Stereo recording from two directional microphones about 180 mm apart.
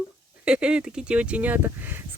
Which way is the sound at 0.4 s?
5° right (ahead or behind).